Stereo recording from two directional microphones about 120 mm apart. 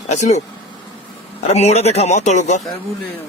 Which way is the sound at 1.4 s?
65° left (ahead or behind).